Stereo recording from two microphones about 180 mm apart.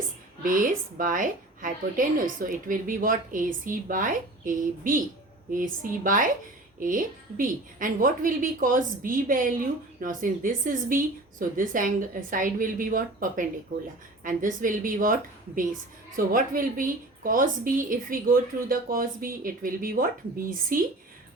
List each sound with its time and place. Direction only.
0.4 s a woman's voice: 50° right (ahead or behind)